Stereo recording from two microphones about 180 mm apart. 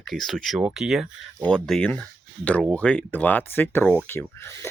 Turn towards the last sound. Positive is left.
turn(degrees=15)  # may be behind; listen again after turning